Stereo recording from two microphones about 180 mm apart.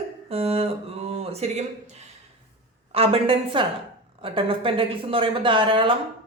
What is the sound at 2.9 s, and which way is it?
A man's voice, 35° right (ahead or behind).